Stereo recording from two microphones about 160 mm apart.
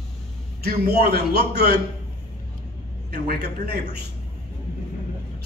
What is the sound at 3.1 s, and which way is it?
Speech, 85° right.